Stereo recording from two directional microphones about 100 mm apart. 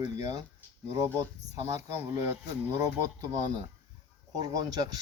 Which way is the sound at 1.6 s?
25° right (ahead or behind).